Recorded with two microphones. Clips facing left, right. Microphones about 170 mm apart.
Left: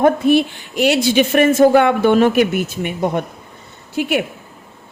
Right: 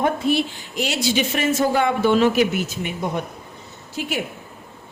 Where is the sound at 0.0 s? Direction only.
55° left (ahead or behind).